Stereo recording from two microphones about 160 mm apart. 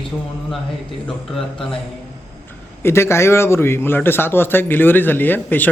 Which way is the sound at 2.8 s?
15° left (ahead or behind).